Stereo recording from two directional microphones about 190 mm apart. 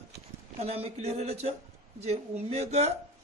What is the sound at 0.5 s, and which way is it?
A man's voice, 30° right (ahead or behind).